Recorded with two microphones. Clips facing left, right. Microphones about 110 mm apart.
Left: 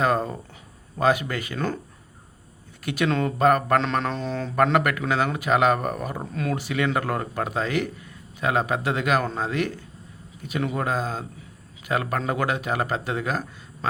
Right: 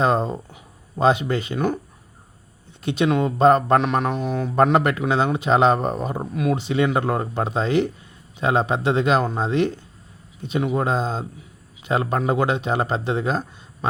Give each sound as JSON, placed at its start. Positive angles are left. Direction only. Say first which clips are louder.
{"t": 0.0, "sound": "speech", "louder": "right 3 dB", "side_deg": -25}
{"t": 2.8, "sound": "speech", "louder": "right 4 dB", "side_deg": -25}
{"t": 3.8, "sound": "speech", "louder": "right 3 dB", "side_deg": -15}
{"t": 4.5, "sound": "speech", "louder": "right 3 dB", "side_deg": -25}